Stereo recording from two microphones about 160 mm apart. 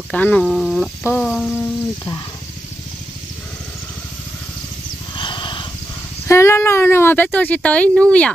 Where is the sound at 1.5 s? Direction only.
15° left (ahead or behind).